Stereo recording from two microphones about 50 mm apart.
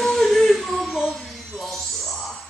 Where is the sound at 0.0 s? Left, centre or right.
Centre.